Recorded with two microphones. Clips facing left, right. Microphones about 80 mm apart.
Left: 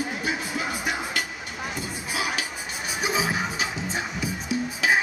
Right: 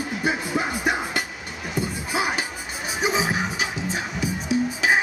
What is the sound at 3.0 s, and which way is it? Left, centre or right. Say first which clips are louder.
Music: right 3 dB; centre.